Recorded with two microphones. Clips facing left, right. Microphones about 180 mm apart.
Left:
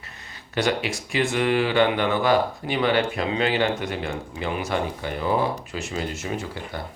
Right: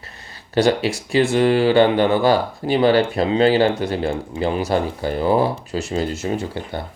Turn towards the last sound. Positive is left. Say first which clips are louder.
# right 6 dB
turn(degrees=-30)  # may be behind; listen again after turning